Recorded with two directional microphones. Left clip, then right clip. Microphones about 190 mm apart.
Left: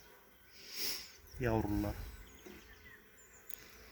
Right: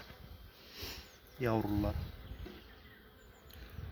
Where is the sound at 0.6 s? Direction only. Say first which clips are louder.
Left 5 dB; 5° left (ahead or behind).